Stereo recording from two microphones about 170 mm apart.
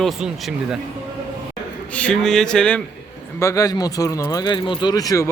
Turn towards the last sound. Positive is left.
turn(degrees=20)  # may be behind; listen again after turning